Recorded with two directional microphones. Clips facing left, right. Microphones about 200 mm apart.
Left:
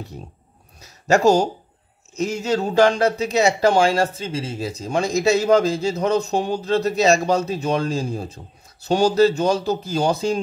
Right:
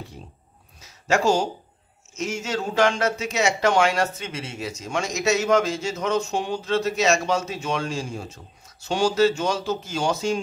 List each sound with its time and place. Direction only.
1.0 s speech: 40° left (ahead or behind)